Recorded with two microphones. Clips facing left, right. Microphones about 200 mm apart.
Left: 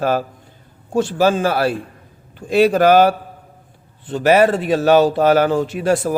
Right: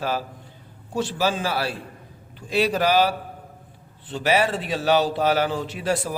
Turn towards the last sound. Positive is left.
turn(degrees=50)  # may be behind; listen again after turning